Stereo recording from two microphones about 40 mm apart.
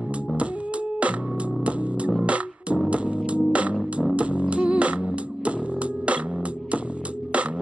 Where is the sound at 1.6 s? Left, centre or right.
Right.